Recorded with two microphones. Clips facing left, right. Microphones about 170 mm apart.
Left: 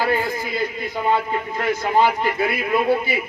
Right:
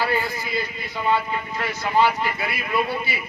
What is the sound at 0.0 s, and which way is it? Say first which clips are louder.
A man's voice: left 3 dB; 50° left (ahead or behind).